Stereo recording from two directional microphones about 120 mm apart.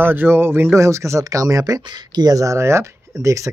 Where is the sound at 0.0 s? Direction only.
15° right (ahead or behind).